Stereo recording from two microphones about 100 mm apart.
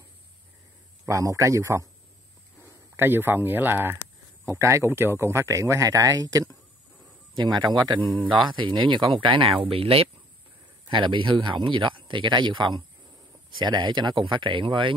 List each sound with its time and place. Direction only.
1.0 s a man's voice: 30° right (ahead or behind)
3.0 s speech: 20° right (ahead or behind); by 6.5 s 35° right (ahead or behind)
7.3 s speech: 45° right (ahead or behind)
9.7 s speech: 70° right (ahead or behind)
10.9 s speech: 55° right (ahead or behind)